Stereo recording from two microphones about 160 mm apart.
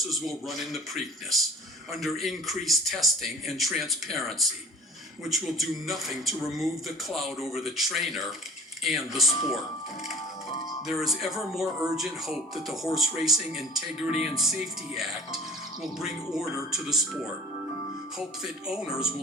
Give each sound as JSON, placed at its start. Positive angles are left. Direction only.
{"t": 0.1, "sound": "speech", "side_deg": 0}
{"t": 1.9, "sound": "speech", "side_deg": 0}
{"t": 10.8, "sound": "speech", "side_deg": 0}
{"t": 18.4, "sound": "speech", "side_deg": -5}